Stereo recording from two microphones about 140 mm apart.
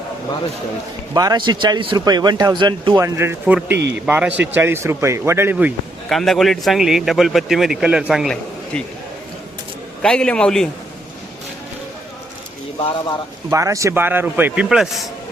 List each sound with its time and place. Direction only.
1.1 s a man's voice: 30° right (ahead or behind)
3.0 s speech: 15° right (ahead or behind)
6.1 s a man's voice: centre (ahead or behind)
10.0 s a man's voice: 5° left (ahead or behind)
13.5 s speech: 20° right (ahead or behind); by 15.0 s 5° right (ahead or behind)